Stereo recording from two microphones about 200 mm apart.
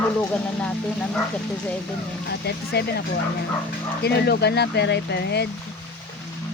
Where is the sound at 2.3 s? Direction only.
55° left (ahead or behind).